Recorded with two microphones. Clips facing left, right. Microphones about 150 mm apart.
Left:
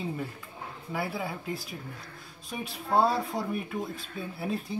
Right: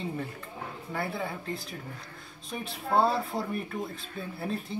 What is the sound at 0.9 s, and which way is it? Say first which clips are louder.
Speech: left 1 dB; centre (ahead or behind).